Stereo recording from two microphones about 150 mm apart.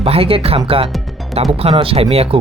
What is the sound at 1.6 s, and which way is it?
Speech, 40° right (ahead or behind).